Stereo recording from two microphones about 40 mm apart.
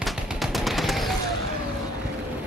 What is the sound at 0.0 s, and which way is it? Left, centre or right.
Gunshot, centre.